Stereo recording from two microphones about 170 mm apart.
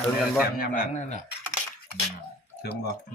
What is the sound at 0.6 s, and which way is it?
Speech, 50° left (ahead or behind).